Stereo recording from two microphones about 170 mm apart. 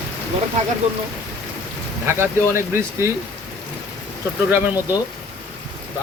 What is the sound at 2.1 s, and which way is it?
Speech, 15° right (ahead or behind).